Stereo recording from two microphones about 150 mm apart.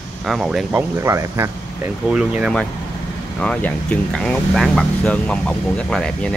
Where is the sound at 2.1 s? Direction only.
5° right (ahead or behind).